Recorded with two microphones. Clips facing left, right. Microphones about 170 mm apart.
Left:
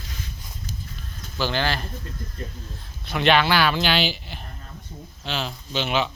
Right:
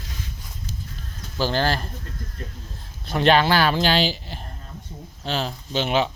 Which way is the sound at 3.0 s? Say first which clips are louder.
Right 2 dB; 40° right (ahead or behind).